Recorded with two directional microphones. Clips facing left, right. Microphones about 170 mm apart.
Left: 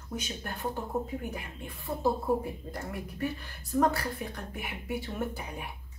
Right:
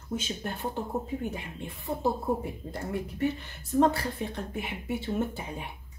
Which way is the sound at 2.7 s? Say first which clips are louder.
Right 4 dB; 25° right (ahead or behind).